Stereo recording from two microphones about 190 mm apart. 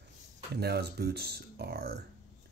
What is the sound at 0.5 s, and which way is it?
Speech, 60° right (ahead or behind).